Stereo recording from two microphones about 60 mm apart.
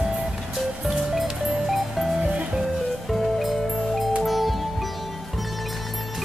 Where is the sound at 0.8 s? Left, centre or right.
Centre.